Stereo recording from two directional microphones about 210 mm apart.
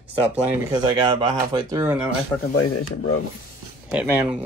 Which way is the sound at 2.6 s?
80° left.